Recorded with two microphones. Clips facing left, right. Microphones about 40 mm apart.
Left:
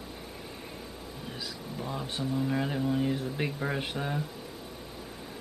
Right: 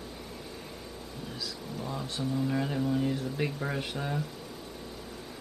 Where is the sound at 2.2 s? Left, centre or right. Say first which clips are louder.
Even; centre.